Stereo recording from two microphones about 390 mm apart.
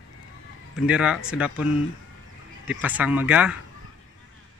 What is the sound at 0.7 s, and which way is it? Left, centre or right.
Speech, centre.